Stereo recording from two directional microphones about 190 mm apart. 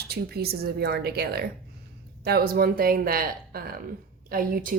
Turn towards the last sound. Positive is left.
turn(degrees=-50)  # may be behind; listen again after turning